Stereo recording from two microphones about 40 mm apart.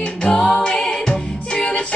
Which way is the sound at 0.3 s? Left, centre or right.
Left.